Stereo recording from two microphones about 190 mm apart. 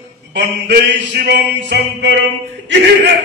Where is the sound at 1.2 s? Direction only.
60° right (ahead or behind).